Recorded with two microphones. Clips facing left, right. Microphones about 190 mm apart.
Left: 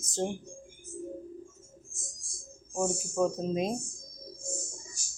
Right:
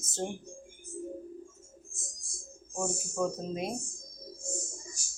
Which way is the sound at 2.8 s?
20° left (ahead or behind).